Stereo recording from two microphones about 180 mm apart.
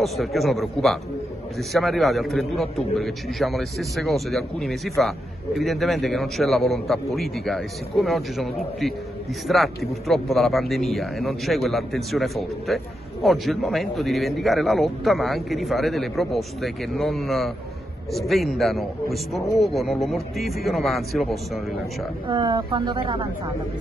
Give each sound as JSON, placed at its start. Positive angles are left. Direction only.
{"t": 0.0, "sound": "a man's voice", "side_deg": 0}
{"t": 22.3, "sound": "speech", "side_deg": -25}